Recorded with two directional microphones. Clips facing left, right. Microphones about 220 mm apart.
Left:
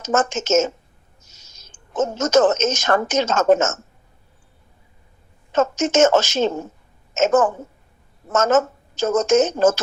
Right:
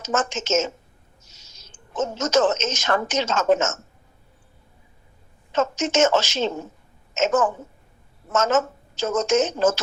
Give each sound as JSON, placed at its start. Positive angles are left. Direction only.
{"t": 0.0, "sound": "a woman's voice", "side_deg": 45}
{"t": 5.5, "sound": "a woman's voice", "side_deg": 45}